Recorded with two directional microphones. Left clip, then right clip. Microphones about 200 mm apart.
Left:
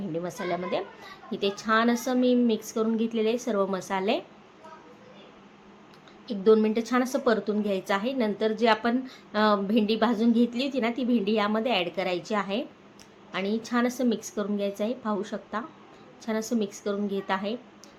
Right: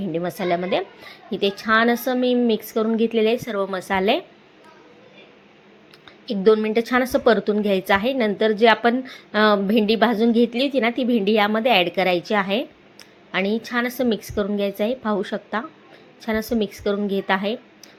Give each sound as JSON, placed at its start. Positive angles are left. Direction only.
{"t": 0.1, "sound": "a woman's voice", "side_deg": -25}
{"t": 6.2, "sound": "a woman's voice", "side_deg": -20}